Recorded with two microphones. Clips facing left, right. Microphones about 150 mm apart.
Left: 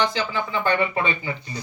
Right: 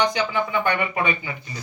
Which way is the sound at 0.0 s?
15° right (ahead or behind).